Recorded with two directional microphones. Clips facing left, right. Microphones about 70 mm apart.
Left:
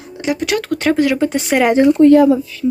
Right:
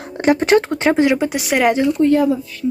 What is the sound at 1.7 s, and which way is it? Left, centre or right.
Speech, left.